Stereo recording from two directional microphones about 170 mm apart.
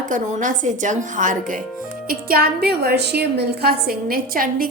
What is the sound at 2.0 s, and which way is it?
A woman's voice, 65° right (ahead or behind).